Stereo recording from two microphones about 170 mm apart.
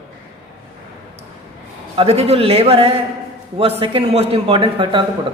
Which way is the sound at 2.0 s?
35° right (ahead or behind).